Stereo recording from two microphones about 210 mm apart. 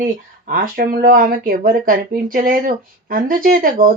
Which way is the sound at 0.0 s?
40° right (ahead or behind).